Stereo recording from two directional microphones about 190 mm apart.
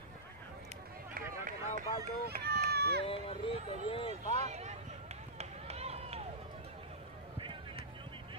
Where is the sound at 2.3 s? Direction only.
55° right (ahead or behind).